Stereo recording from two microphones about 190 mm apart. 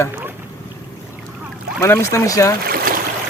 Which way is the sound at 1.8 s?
15° left (ahead or behind).